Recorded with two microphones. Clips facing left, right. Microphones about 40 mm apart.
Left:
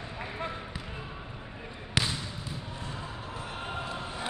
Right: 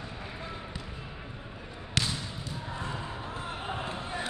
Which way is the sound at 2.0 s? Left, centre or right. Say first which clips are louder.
Left 1 dB; centre.